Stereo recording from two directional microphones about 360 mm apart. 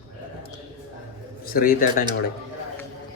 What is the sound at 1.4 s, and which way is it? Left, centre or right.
Speech, left.